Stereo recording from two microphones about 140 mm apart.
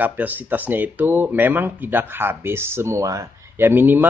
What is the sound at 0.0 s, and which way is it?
Speech, 10° right (ahead or behind).